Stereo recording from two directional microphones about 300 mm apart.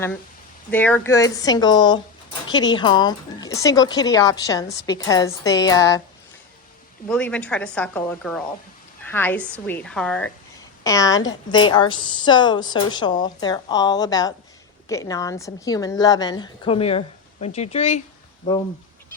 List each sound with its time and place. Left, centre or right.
0.7 s a woman's voice: centre
7.1 s a woman's voice: centre